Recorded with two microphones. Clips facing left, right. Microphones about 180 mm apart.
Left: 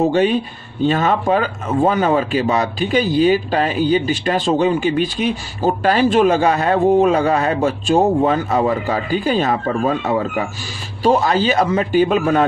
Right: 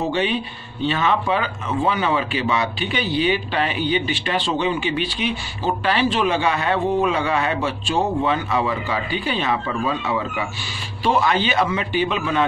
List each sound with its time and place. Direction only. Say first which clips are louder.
0.1 s a man's voice: left 6 dB; 45° left (ahead or behind)